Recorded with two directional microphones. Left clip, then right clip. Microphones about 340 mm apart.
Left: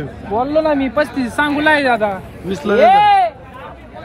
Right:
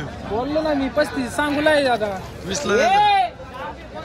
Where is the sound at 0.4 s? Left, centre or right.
Left.